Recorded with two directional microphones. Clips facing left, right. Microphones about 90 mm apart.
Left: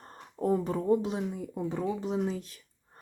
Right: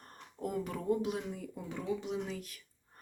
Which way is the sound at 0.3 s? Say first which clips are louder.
Left 9 dB; 35° left (ahead or behind).